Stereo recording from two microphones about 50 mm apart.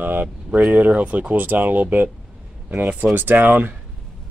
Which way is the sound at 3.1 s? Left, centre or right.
Right.